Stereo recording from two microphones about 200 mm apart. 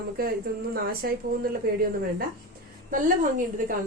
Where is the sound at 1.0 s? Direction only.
50° right (ahead or behind).